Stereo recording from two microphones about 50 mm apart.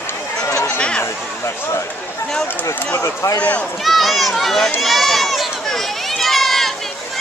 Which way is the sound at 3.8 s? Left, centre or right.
Centre.